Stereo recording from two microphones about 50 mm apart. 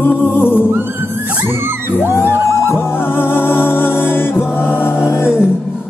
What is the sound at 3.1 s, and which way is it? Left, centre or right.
Music, left.